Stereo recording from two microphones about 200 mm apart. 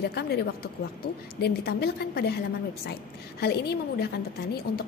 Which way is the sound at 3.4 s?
55° left (ahead or behind).